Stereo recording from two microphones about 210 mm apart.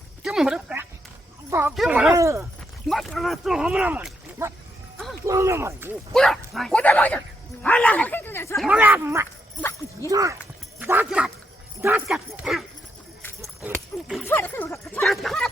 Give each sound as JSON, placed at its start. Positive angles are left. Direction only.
{"t": 0.2, "sound": "a sound", "side_deg": 0}
{"t": 1.5, "sound": "speech", "side_deg": -10}
{"t": 2.9, "sound": "speech", "side_deg": 0}
{"t": 6.1, "sound": "speech", "side_deg": 0}
{"t": 8.5, "sound": "speech", "side_deg": -5}
{"t": 9.6, "sound": "dog", "side_deg": 10}
{"t": 10.1, "sound": "speech", "side_deg": -15}
{"t": 13.7, "sound": "speech", "side_deg": 0}
{"t": 14.3, "sound": "speech", "side_deg": 10}
{"t": 15.0, "sound": "speech", "side_deg": 0}